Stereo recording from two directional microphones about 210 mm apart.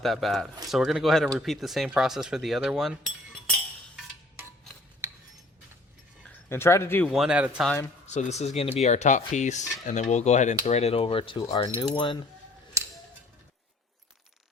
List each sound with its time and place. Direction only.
0.0 s speech: centre (ahead or behind)
5.0 s a sound: 15° right (ahead or behind)
6.5 s speech: 10° left (ahead or behind)
7.1 s speech: 5° right (ahead or behind)
8.0 s speech: 35° left (ahead or behind)
10.7 s cutlery: 30° left (ahead or behind)